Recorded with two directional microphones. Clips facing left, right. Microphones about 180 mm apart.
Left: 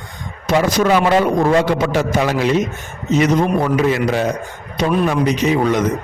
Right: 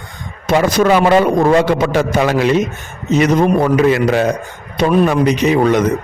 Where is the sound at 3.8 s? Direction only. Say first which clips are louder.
Right 4 dB; 65° right (ahead or behind).